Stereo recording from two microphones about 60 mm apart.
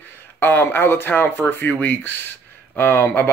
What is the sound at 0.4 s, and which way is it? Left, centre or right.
Speech, left.